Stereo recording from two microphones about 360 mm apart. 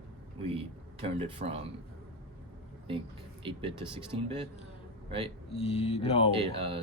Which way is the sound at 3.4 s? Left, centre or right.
Centre.